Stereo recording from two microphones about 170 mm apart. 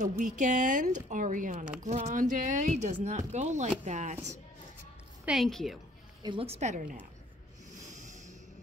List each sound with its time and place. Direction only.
0.2 s speech: 45° right (ahead or behind)
5.2 s a woman's voice: centre (ahead or behind)
6.2 s a woman's voice: 35° right (ahead or behind)
7.9 s a sound: 45° right (ahead or behind)